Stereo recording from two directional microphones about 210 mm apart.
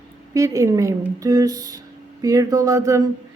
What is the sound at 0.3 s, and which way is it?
Speech, 15° right (ahead or behind).